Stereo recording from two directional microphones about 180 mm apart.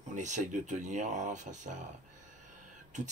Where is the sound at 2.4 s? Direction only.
45° right (ahead or behind).